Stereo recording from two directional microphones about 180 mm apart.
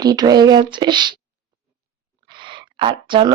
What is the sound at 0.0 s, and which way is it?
Speech, 20° right (ahead or behind).